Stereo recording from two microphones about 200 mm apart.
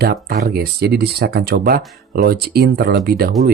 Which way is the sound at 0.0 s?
50° right (ahead or behind).